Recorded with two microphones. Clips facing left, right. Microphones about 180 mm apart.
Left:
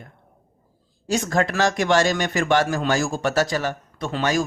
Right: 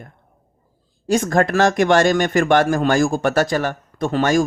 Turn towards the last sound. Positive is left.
turn(degrees=-50)  # may be behind; listen again after turning